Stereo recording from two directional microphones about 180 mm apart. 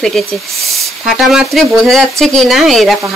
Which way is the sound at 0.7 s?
Centre (ahead or behind).